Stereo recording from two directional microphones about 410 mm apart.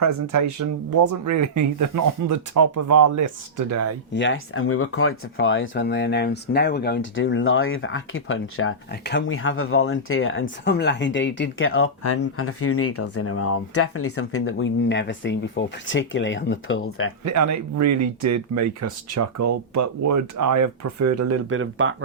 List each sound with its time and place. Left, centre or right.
0.0 s speech: right
4.1 s speech: left
17.3 s speech: right